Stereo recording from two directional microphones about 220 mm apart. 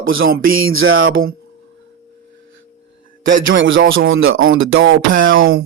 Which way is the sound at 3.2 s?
60° right (ahead or behind).